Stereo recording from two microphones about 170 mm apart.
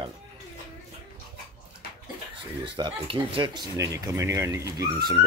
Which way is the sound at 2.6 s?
30° right (ahead or behind).